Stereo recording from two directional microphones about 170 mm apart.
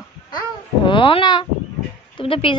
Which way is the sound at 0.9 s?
30° left (ahead or behind).